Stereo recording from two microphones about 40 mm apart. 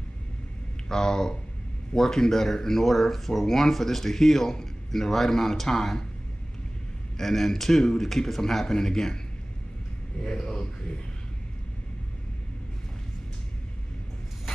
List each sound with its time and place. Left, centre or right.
0.8 s speech: centre
7.2 s speech: centre
10.5 s speech: centre